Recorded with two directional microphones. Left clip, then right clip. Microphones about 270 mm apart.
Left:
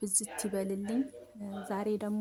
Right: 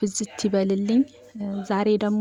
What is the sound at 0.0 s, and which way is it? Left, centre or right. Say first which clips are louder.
Speech: right 10 dB; left.